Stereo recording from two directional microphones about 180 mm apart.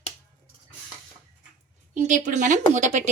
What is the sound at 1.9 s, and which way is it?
A woman's voice, 45° right (ahead or behind).